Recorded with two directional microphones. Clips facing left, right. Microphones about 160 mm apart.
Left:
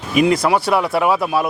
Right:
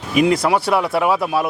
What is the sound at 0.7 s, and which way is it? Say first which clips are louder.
Speech: left 1 dB; 15° left (ahead or behind).